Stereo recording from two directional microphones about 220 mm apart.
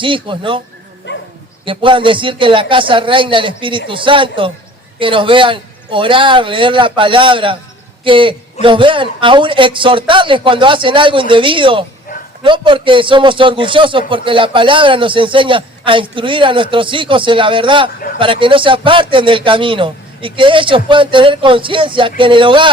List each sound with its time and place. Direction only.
0.0 s a man's voice: 20° right (ahead or behind)
1.1 s bow-wow: 50° left (ahead or behind)
1.6 s a man's voice: 25° right (ahead or behind)